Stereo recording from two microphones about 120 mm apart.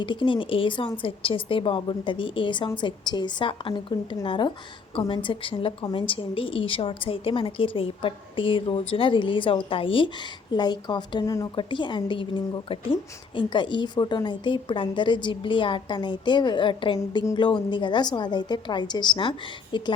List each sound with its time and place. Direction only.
0.0 s a woman's voice: 45° left (ahead or behind)